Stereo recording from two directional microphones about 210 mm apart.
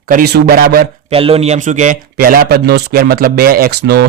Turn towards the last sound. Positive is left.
turn(degrees=-50)  # may be behind; listen again after turning